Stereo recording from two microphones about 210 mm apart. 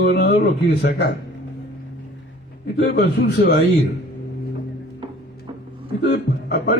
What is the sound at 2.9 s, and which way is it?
Speech, 50° left (ahead or behind).